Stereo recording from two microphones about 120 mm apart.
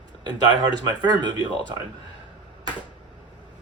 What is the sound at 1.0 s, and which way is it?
Speech, 35° right (ahead or behind).